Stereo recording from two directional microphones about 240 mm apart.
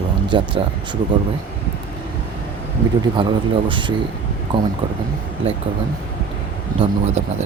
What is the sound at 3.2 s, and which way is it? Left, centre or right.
Speech, right.